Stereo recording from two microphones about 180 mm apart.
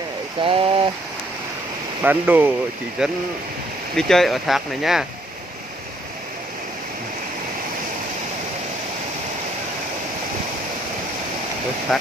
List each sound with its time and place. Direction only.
0.4 s speech: 30° right (ahead or behind)
2.0 s speech: 10° right (ahead or behind)
11.9 s speech: centre (ahead or behind)